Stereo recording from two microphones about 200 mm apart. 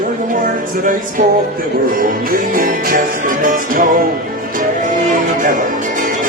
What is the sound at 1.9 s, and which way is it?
Music, 45° right (ahead or behind).